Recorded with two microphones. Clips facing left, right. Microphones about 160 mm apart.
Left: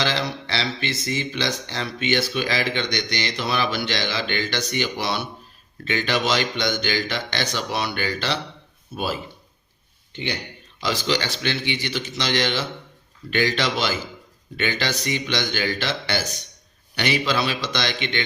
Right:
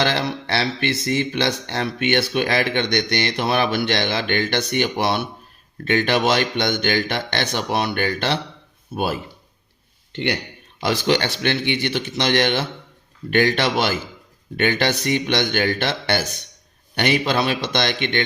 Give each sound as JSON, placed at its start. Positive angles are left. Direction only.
{"t": 0.0, "sound": "speech", "side_deg": -55}
{"t": 10.1, "sound": "speech", "side_deg": -65}